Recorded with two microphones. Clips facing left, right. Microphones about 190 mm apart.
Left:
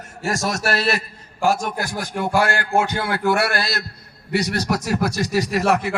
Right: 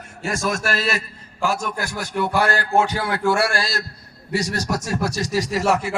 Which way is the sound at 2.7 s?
5° left (ahead or behind).